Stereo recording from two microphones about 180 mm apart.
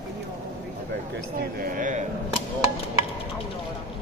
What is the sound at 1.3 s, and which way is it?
Speech, 50° right (ahead or behind).